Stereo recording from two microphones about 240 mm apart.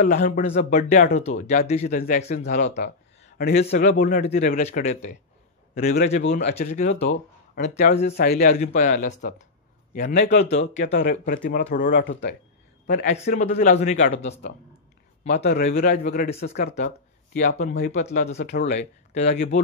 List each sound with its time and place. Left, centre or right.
0.0 s speech: left
2.4 s a man's voice: left
6.2 s a man's voice: left
6.5 s speech: left
9.9 s a man's voice: left
10.8 s a man's voice: left
15.2 s speech: left